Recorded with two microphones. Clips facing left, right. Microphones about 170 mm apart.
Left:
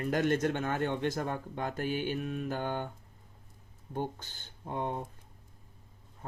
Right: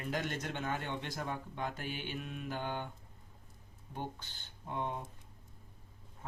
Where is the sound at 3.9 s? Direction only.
45° left (ahead or behind).